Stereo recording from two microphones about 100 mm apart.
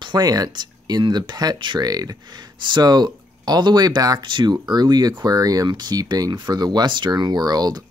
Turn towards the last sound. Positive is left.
turn(degrees=-40)  # may be behind; listen again after turning